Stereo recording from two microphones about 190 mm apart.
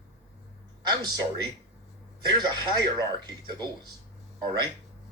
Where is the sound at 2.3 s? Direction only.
20° right (ahead or behind).